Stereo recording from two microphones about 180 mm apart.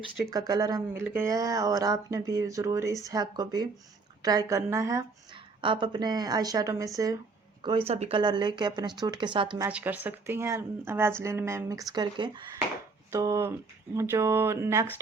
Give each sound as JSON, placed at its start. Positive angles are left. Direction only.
{"t": 0.3, "sound": "speech", "side_deg": -20}
{"t": 9.6, "sound": "speech", "side_deg": -10}